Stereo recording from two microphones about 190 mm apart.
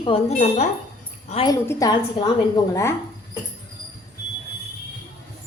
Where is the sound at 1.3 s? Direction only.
25° left (ahead or behind).